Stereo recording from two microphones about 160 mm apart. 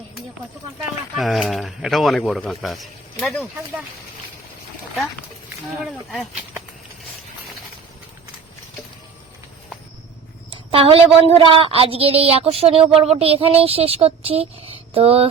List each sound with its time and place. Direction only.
1.1 s speech: centre (ahead or behind)
5.8 s speech: centre (ahead or behind)
10.5 s a woman's voice: 35° right (ahead or behind)